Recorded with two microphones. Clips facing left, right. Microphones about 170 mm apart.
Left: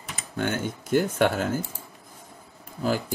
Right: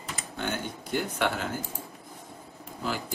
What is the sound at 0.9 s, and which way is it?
Speech, 45° left (ahead or behind).